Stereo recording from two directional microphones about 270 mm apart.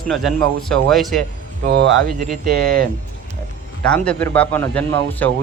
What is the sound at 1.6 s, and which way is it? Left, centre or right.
Speech, right.